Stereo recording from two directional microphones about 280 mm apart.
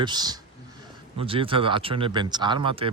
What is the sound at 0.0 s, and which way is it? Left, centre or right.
Speech, centre.